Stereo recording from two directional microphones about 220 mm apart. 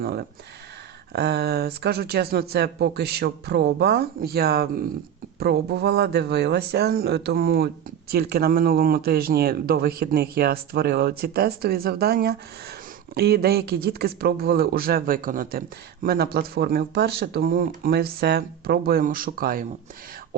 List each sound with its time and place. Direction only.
0.0 s speech: 45° right (ahead or behind)